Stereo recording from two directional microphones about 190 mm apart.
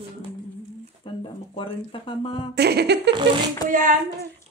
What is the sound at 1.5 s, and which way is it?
Speech, 30° left (ahead or behind).